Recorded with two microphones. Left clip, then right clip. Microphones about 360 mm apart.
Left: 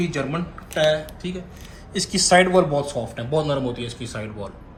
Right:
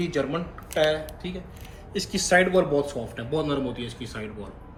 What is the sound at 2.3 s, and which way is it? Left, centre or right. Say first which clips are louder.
Speech: left 4 dB; left.